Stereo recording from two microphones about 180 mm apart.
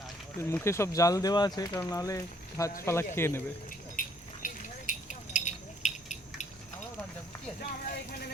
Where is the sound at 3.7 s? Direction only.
45° left (ahead or behind).